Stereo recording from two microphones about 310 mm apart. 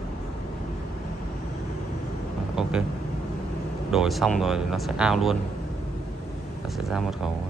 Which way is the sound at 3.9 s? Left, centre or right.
Centre.